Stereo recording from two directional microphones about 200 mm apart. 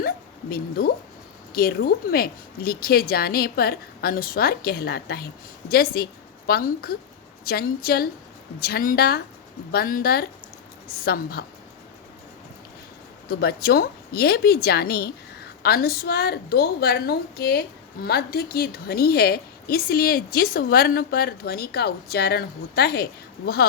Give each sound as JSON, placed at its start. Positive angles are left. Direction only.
{"t": 0.5, "sound": "a woman's voice", "side_deg": 50}
{"t": 13.2, "sound": "a woman's voice", "side_deg": 50}